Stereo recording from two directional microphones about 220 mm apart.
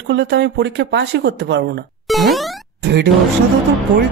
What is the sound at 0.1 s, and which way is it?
Speech, 50° right (ahead or behind).